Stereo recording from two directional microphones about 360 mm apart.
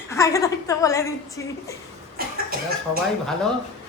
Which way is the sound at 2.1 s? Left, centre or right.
Right.